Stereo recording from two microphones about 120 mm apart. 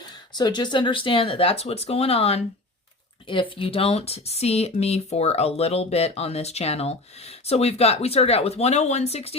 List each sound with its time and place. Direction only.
0.3 s speech: 35° left (ahead or behind); by 2.4 s 55° left (ahead or behind)
3.6 s speech: 50° left (ahead or behind)